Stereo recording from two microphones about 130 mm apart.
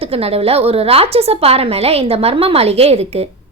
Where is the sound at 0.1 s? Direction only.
50° right (ahead or behind).